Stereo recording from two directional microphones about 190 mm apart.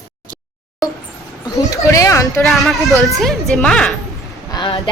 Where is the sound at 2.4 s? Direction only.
Centre (ahead or behind).